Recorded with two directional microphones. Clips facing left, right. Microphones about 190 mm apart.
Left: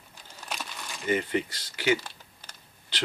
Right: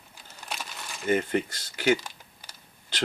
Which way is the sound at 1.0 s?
45° right (ahead or behind).